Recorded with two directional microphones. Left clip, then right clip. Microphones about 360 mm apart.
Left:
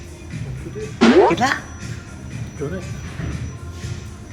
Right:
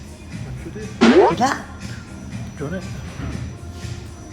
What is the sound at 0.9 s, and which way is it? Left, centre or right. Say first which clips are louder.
Speech: even; centre.